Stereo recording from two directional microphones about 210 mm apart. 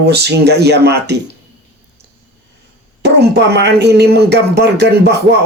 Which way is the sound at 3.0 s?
50° right (ahead or behind).